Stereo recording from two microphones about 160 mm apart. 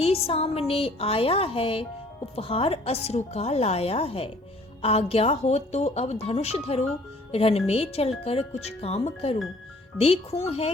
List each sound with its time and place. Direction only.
0.0 s speech: 40° left (ahead or behind)